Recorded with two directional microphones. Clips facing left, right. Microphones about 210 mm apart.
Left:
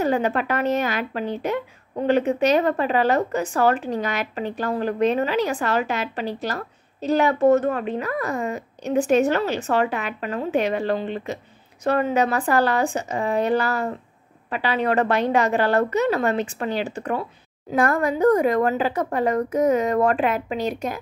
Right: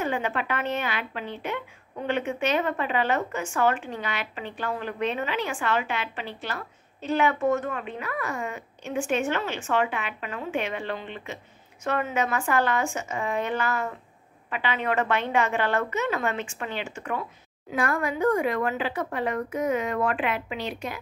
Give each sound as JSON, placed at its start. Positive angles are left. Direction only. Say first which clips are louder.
{"t": 0.0, "sound": "speech", "louder": "left 7 dB", "side_deg": 40}